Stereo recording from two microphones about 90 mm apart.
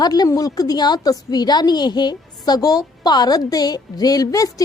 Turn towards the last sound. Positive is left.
turn(degrees=40)  # may be behind; listen again after turning